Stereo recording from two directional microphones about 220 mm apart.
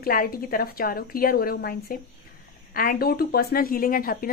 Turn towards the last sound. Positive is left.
turn(degrees=40)  # may be behind; listen again after turning